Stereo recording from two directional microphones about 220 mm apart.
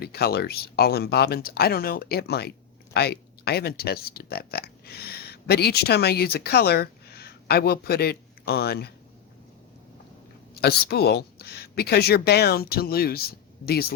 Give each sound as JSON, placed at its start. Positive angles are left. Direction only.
{"t": 0.0, "sound": "speech", "side_deg": 45}
{"t": 10.6, "sound": "speech", "side_deg": 45}